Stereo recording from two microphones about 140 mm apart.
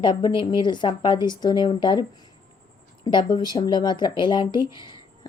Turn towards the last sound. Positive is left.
turn(degrees=35)  # may be behind; listen again after turning